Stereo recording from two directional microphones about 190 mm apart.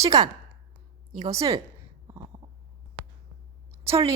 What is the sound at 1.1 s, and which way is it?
Speech, 35° right (ahead or behind).